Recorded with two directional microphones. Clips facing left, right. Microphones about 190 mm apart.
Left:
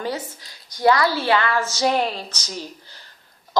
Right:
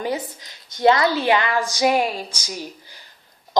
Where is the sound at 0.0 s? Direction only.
15° right (ahead or behind).